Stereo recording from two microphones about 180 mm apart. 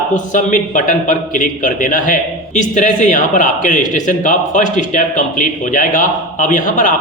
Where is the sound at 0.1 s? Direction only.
45° left (ahead or behind).